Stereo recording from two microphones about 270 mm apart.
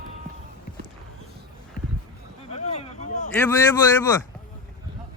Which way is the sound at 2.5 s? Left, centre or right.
Left.